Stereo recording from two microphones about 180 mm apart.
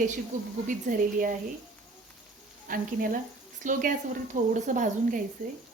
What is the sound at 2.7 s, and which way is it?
Speech, 50° right (ahead or behind).